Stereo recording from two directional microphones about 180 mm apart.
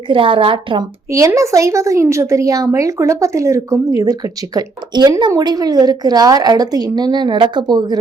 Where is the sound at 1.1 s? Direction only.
15° right (ahead or behind).